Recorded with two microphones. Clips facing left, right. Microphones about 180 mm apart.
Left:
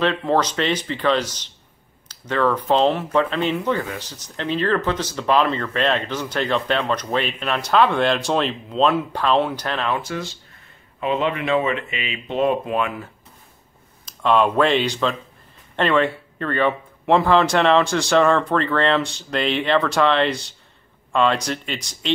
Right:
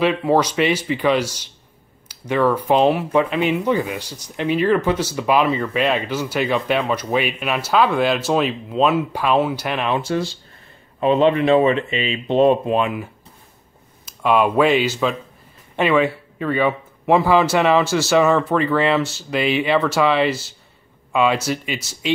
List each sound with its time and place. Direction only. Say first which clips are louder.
0.0 s speech: right 3 dB; 10° right (ahead or behind)
14.0 s speech: right 1 dB; 10° right (ahead or behind)